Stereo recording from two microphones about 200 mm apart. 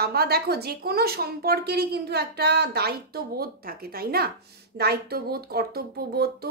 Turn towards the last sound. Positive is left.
turn(degrees=-50)  # may be behind; listen again after turning